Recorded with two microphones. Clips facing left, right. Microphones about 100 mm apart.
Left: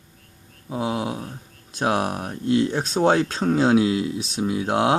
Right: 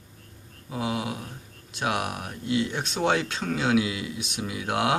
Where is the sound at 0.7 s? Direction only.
25° left (ahead or behind).